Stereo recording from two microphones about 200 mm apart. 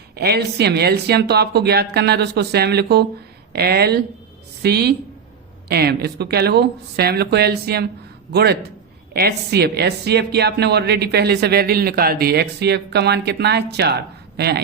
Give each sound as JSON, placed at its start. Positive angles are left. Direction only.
{"t": 0.2, "sound": "a woman's voice", "side_deg": -55}